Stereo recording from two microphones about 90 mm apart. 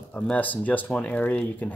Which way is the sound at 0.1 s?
15° left (ahead or behind).